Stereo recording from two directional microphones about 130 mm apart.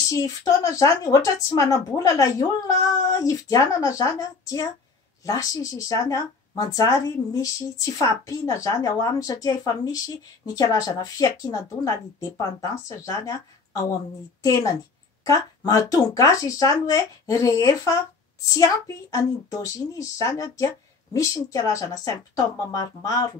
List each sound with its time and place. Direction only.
0.5 s speech: 25° left (ahead or behind)